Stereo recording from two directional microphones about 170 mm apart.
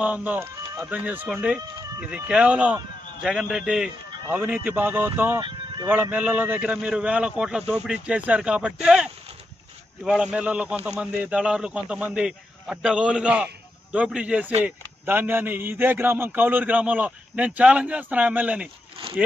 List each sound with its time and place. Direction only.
0.0 s a man's voice: 10° right (ahead or behind)
5.4 s a sound: 30° right (ahead or behind)
5.9 s a man's voice: 10° right (ahead or behind)